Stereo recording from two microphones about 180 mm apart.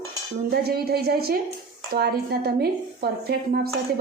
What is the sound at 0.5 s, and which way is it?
A woman's voice, 60° right (ahead or behind).